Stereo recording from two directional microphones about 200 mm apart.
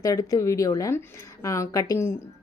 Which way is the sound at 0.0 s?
15° left (ahead or behind).